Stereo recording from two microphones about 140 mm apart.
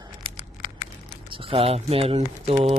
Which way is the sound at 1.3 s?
40° right (ahead or behind).